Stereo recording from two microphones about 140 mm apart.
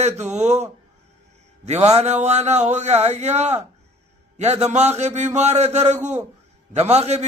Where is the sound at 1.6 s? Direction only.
50° right (ahead or behind).